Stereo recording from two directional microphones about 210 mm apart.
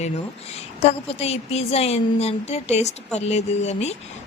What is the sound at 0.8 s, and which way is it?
A woman's voice, 30° left (ahead or behind).